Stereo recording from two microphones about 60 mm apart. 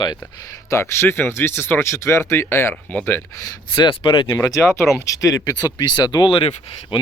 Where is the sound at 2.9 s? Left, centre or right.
Left.